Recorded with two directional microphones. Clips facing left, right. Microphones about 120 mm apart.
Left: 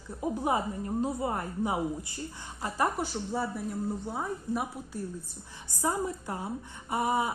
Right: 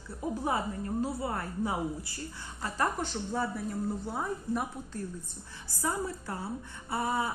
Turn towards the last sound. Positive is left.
turn(degrees=15)  # may be behind; listen again after turning